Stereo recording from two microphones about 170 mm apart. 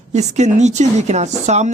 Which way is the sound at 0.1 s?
40° right (ahead or behind).